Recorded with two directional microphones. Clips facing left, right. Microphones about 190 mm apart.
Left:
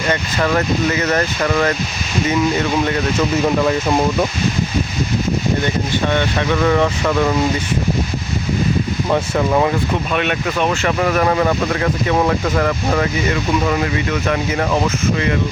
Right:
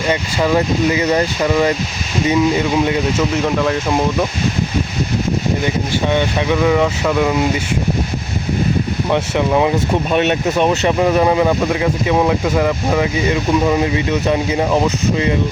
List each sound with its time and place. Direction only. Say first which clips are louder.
0.1 s speech: right 2 dB; 10° right (ahead or behind)
3.3 s speech: left 1 dB; 5° left (ahead or behind)
6.1 s speech: right 3 dB; 10° right (ahead or behind)
9.0 s speech: right 1 dB; centre (ahead or behind)
9.7 s speech: right 3 dB; 25° right (ahead or behind)